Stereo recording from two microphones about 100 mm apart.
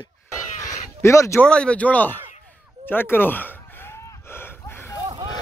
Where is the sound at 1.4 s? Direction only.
10° left (ahead or behind).